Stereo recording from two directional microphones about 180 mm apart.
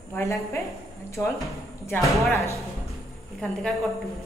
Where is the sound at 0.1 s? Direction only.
15° left (ahead or behind).